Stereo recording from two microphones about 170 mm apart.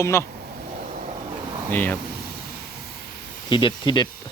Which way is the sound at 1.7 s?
10° left (ahead or behind).